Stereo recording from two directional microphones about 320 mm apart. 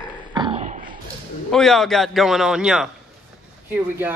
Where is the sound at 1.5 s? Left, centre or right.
Centre.